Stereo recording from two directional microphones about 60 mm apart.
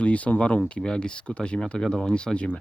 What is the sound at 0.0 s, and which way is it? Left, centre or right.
Speech, left.